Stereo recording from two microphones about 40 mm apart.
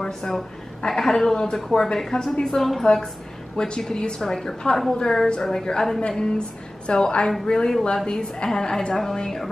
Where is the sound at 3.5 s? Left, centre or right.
Left.